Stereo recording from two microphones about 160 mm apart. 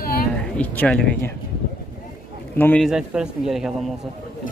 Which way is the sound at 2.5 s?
10° left (ahead or behind).